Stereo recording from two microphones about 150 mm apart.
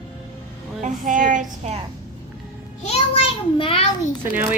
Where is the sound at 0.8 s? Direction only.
60° right (ahead or behind).